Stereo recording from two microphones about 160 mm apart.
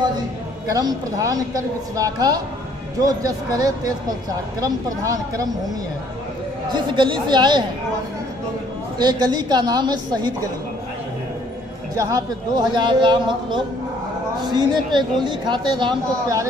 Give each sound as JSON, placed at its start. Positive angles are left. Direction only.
{"t": 0.7, "sound": "speech", "side_deg": -25}
{"t": 6.7, "sound": "speech", "side_deg": -30}
{"t": 8.9, "sound": "speech", "side_deg": -25}
{"t": 12.0, "sound": "speech", "side_deg": -25}